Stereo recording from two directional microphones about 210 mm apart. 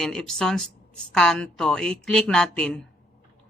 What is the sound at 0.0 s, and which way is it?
A woman's voice, centre (ahead or behind).